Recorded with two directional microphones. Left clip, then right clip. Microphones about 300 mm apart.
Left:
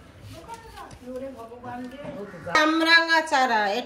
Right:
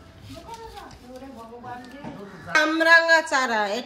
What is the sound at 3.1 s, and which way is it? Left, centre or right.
Speech, centre.